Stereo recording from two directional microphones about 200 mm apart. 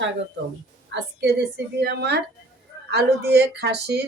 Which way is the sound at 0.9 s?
55° right (ahead or behind).